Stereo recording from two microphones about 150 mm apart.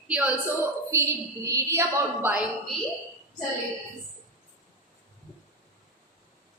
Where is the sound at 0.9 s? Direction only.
20° right (ahead or behind).